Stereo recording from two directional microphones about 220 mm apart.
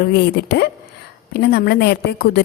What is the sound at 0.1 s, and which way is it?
A woman's voice, 45° left (ahead or behind).